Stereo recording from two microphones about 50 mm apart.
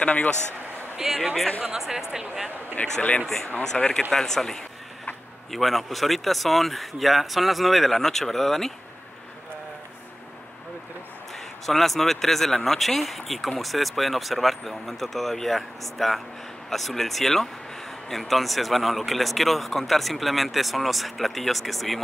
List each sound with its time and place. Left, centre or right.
0.0 s a man's voice: left
0.9 s speech: centre
2.7 s a man's voice: left
3.6 s speech: centre
11.3 s speech: centre